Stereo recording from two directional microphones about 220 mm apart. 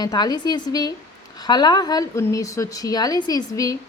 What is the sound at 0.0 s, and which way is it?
A woman's voice, 20° left (ahead or behind).